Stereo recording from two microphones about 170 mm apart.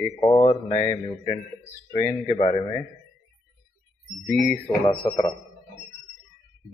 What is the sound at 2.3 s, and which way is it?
Speech, 35° left (ahead or behind).